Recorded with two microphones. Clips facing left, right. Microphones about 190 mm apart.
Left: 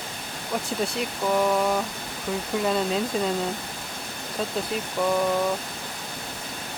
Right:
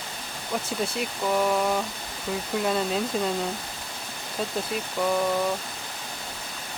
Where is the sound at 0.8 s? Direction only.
Centre (ahead or behind).